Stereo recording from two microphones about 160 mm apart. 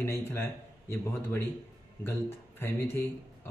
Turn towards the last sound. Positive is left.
turn(degrees=15)  # may be behind; listen again after turning